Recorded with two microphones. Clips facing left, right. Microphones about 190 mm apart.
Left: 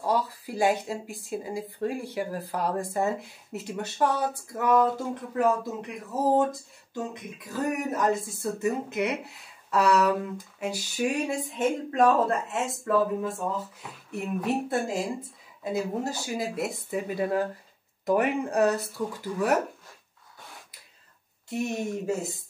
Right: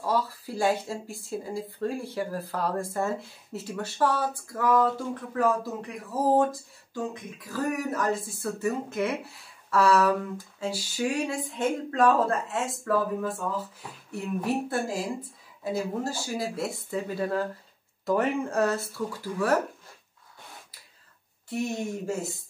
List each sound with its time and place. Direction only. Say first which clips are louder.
0.0 s speech: left 1 dB; 15° left (ahead or behind)
7.5 s speech: even; 20° left (ahead or behind)
21.5 s speech: left 1 dB; 20° left (ahead or behind)